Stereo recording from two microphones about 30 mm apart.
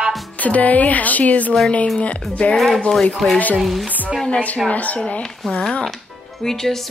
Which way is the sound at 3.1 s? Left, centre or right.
Centre.